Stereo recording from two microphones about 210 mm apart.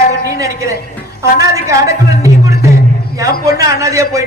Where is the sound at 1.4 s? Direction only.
15° right (ahead or behind).